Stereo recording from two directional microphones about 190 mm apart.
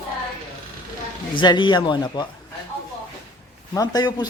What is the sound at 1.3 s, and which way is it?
Speech, 25° left (ahead or behind).